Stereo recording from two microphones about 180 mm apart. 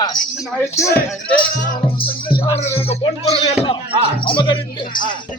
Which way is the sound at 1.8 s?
30° left (ahead or behind).